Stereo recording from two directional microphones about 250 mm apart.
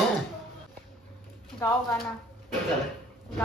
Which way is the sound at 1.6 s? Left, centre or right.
Centre.